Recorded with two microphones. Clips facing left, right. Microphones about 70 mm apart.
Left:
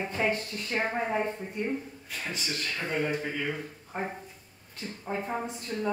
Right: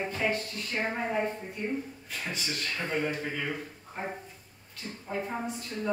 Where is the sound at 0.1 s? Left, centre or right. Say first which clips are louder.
Left 1 dB; left.